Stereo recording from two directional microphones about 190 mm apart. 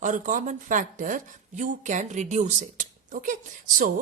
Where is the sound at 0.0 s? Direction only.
40° right (ahead or behind).